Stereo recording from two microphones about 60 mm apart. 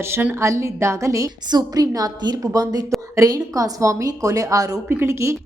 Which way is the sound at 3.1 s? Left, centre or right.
Right.